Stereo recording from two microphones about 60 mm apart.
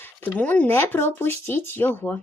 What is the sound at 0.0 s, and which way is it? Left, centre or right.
Speech, left.